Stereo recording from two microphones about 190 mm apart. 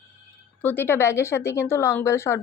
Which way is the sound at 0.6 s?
10° left (ahead or behind).